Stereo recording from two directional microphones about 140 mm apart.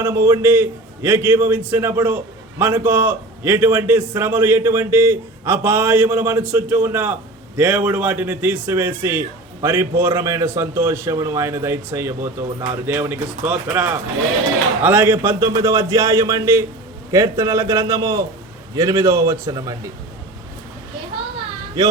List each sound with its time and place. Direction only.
0.0 s a man's voice: 20° right (ahead or behind)